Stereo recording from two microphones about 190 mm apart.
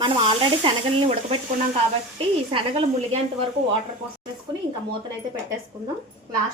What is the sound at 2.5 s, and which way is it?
Speech, 30° right (ahead or behind).